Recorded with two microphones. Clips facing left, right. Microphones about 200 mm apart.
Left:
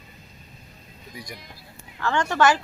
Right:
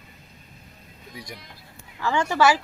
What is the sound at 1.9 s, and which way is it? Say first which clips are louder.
Speech: even; 10° right (ahead or behind).